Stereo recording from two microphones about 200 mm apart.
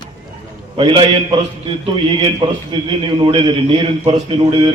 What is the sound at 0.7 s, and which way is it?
A man's voice, 30° right (ahead or behind).